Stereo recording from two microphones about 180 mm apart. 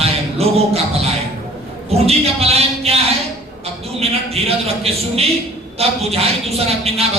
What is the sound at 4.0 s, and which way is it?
A man's voice, 35° right (ahead or behind).